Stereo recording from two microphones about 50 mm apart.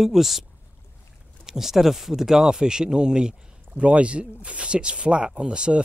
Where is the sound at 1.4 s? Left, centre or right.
Centre.